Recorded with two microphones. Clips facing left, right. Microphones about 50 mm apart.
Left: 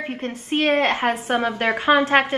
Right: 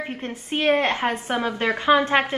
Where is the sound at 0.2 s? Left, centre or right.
Centre.